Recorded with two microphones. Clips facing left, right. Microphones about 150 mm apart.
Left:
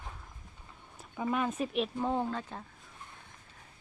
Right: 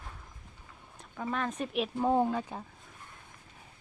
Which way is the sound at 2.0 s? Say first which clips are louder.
Right 5 dB; 15° right (ahead or behind).